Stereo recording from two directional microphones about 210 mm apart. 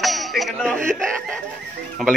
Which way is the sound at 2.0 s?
Centre (ahead or behind).